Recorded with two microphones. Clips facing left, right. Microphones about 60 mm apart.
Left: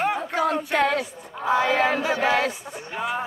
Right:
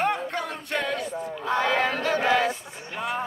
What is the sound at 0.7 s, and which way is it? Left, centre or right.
Speech, left.